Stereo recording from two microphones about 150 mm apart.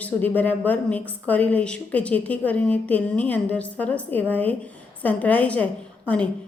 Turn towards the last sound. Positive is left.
turn(degrees=10)  # may be behind; listen again after turning